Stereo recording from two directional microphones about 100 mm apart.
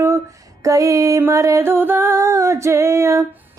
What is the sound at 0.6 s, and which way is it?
Music, 35° right (ahead or behind).